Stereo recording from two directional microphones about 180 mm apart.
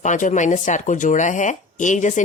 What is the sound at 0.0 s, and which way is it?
Speech, 45° left (ahead or behind).